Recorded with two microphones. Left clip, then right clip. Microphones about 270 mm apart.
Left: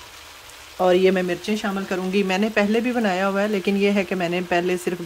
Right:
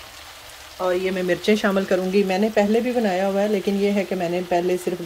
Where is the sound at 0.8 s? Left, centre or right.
Left.